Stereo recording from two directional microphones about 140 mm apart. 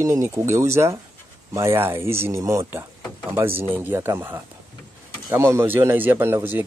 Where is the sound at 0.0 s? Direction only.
20° right (ahead or behind).